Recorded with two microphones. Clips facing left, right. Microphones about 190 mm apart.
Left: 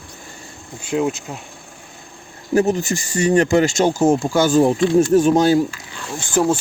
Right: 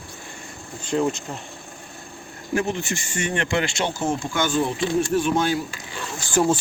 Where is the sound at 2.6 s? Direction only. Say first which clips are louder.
Left 8 dB; 40° left (ahead or behind).